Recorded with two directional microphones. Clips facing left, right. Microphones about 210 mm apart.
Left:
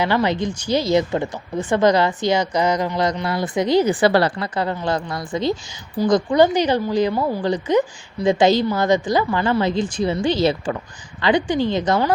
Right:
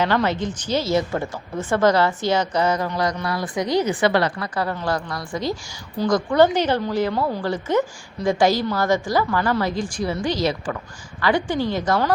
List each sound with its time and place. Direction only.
0.0 s speech: 15° left (ahead or behind)